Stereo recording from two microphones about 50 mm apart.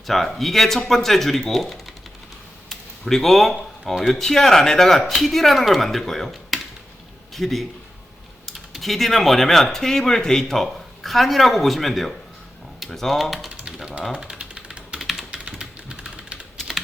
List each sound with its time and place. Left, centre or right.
0.1 s speech: centre
2.6 s a sound: centre
3.9 s speech: centre
4.2 s speech: centre
14.1 s typewriter: centre
14.9 s typing: centre
15.3 s typing: centre